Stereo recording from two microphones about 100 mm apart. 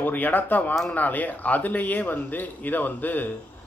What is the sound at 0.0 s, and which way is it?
Speech, 15° left (ahead or behind).